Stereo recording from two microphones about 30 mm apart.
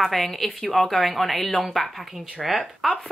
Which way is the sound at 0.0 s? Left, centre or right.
Centre.